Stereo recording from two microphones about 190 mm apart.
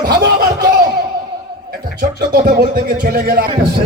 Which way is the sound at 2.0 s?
50° right (ahead or behind).